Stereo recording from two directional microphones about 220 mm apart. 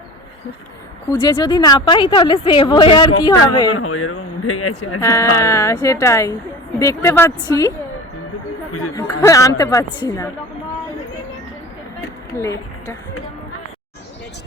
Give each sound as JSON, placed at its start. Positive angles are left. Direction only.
{"t": 1.2, "sound": "a woman's voice", "side_deg": 20}
{"t": 3.7, "sound": "a man's voice", "side_deg": 75}
{"t": 4.9, "sound": "speech", "side_deg": 15}
{"t": 9.2, "sound": "speech", "side_deg": 15}
{"t": 12.3, "sound": "a woman's voice", "side_deg": 15}